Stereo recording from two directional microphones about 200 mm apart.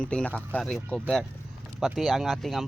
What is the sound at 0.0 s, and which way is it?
Speech, 5° left (ahead or behind).